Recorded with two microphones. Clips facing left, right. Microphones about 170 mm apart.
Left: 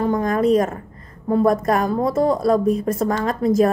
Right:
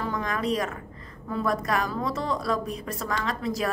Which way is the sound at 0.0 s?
50° left (ahead or behind).